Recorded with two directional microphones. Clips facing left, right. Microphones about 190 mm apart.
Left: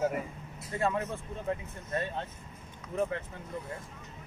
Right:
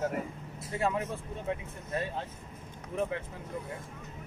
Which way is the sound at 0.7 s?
15° right (ahead or behind).